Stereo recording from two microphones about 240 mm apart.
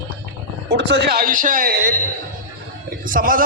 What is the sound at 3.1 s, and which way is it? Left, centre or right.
Speech, right.